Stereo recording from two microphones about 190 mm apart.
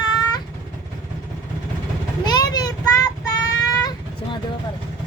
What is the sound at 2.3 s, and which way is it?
Child singing, 20° left (ahead or behind).